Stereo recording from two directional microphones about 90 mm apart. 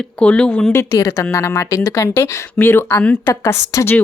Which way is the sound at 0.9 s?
35° left (ahead or behind).